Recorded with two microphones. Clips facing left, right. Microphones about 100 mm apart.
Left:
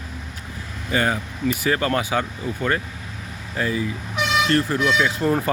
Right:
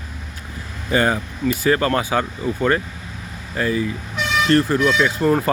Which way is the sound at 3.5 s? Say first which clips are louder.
Right 3 dB; 10° left (ahead or behind).